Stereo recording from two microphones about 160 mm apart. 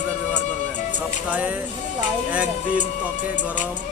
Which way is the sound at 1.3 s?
10° right (ahead or behind).